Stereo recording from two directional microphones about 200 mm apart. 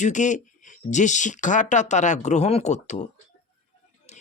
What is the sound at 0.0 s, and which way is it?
Speech, 40° left (ahead or behind).